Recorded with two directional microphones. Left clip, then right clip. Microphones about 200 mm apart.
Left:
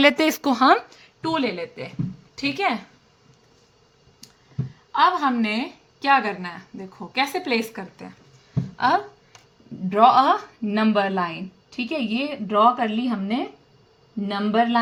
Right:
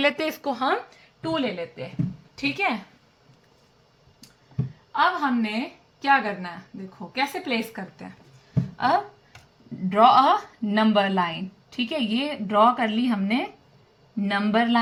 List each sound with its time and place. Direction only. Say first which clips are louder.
0.0 s speech: left 6 dB; 35° left (ahead or behind); by 0.8 s 50° left (ahead or behind)
1.2 s a woman's voice: left 3 dB; 30° left (ahead or behind); by 2.7 s 15° left (ahead or behind)
4.9 s a woman's voice: left 3 dB; 30° left (ahead or behind)
8.7 s a sound: left 2 dB; 20° left (ahead or behind)
10.0 s a woman's voice: left 1 dB; 25° left (ahead or behind)